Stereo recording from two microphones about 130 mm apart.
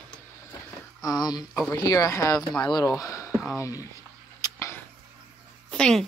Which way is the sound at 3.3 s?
Centre (ahead or behind).